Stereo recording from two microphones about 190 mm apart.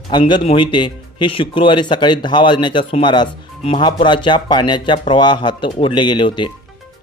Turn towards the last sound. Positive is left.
turn(degrees=25)  # may be behind; listen again after turning